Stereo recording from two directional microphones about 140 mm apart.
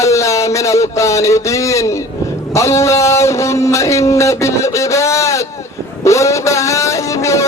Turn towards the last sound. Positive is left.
turn(degrees=20)  # may be behind; listen again after turning